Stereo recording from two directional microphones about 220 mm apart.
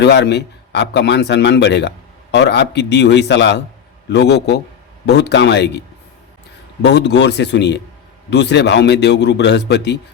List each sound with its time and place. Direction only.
0.0 s a man's voice: 50° left (ahead or behind)
6.8 s a man's voice: 50° left (ahead or behind)